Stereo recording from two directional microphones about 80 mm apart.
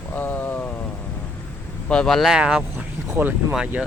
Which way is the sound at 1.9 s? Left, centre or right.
Centre.